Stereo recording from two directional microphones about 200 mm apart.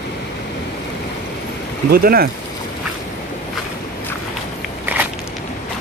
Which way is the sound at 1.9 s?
50° right (ahead or behind).